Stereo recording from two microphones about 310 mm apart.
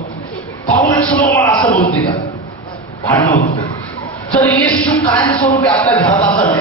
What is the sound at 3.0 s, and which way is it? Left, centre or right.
A man's voice, centre.